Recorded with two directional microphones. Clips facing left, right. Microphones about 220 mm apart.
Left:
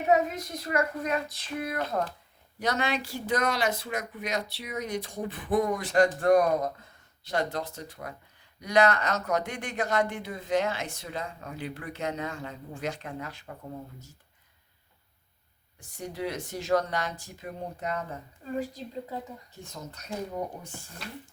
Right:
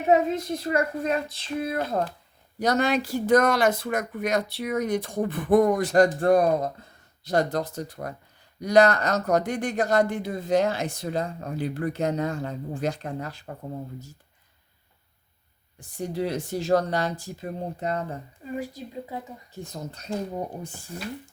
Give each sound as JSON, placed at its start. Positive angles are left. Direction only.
{"t": 0.1, "sound": "speech", "side_deg": -30}
{"t": 2.6, "sound": "speech", "side_deg": -40}
{"t": 7.3, "sound": "speech", "side_deg": -40}
{"t": 15.8, "sound": "speech", "side_deg": -35}
{"t": 18.4, "sound": "speech", "side_deg": -10}
{"t": 19.6, "sound": "speech", "side_deg": -35}